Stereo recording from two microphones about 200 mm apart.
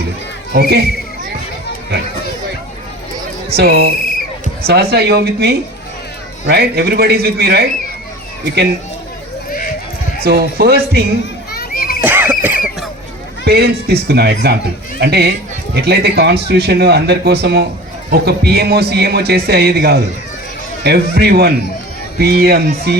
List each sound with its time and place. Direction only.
0.5 s a man's voice: 55° right (ahead or behind)
3.5 s a man's voice: 55° right (ahead or behind)
10.2 s a man's voice: 50° right (ahead or behind)
11.5 s children playing: 50° left (ahead or behind)
12.0 s a sound: 10° right (ahead or behind)
13.4 s a man's voice: 55° right (ahead or behind)